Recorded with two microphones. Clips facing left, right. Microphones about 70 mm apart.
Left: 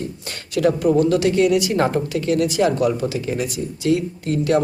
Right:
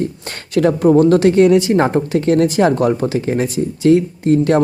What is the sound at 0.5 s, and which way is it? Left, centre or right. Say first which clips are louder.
A woman's voice: right 5 dB; right.